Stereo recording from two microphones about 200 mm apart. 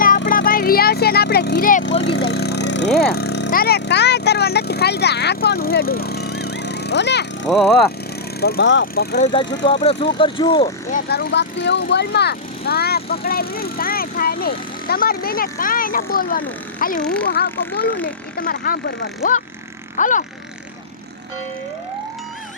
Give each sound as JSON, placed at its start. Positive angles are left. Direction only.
{"t": 0.3, "sound": "vehicle", "side_deg": 45}
{"t": 3.0, "sound": "speech", "side_deg": 50}
{"t": 7.4, "sound": "speech", "side_deg": 0}
{"t": 8.4, "sound": "speech", "side_deg": 50}
{"t": 9.3, "sound": "speech", "side_deg": 20}
{"t": 11.1, "sound": "speech", "side_deg": 55}
{"t": 17.6, "sound": "speech", "side_deg": 10}
{"t": 18.3, "sound": "speech", "side_deg": 50}
{"t": 20.0, "sound": "a sound", "side_deg": 40}